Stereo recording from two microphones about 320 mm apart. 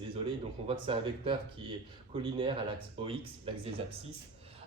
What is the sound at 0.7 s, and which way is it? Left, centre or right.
Speech, centre.